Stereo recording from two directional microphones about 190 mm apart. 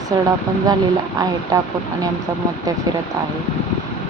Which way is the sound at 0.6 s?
20° right (ahead or behind).